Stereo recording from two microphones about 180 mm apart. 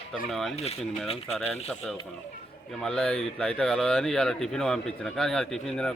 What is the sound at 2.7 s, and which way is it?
Speech, 5° left (ahead or behind).